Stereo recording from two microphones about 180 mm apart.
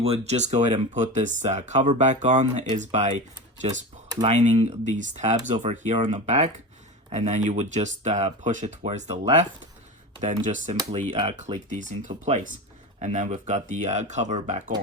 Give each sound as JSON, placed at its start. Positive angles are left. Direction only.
{"t": 0.0, "sound": "speech", "side_deg": -35}